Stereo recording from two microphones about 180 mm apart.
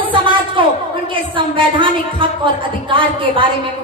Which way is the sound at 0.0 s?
30° right (ahead or behind).